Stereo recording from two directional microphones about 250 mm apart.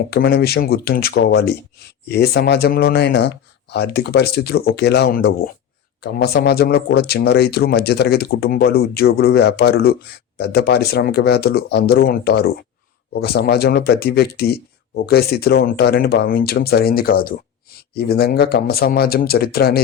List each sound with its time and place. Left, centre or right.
0.1 s speech: left